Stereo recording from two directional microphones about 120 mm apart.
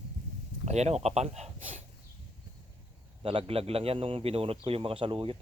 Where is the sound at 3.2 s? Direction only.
50° right (ahead or behind).